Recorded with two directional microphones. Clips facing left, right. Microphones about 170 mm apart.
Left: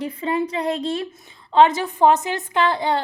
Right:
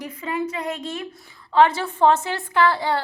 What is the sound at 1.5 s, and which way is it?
A woman's voice, 20° left (ahead or behind).